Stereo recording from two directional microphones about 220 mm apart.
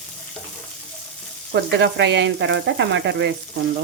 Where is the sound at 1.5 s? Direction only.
55° right (ahead or behind).